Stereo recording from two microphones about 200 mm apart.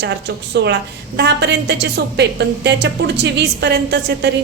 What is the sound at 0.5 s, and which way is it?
A woman's voice, 60° right (ahead or behind).